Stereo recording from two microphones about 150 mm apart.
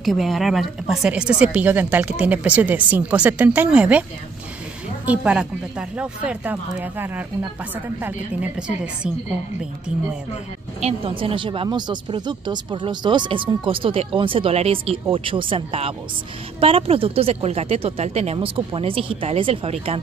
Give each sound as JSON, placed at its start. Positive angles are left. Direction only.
{"t": 0.0, "sound": "a woman's voice", "side_deg": 0}
{"t": 5.0, "sound": "a woman's voice", "side_deg": -10}
{"t": 10.8, "sound": "speech", "side_deg": -40}